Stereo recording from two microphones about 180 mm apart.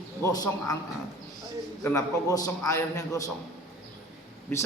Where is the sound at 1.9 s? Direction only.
20° left (ahead or behind).